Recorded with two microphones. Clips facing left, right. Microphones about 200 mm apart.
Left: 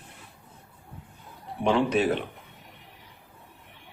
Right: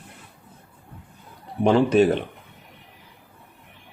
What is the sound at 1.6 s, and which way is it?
Speech, 35° right (ahead or behind).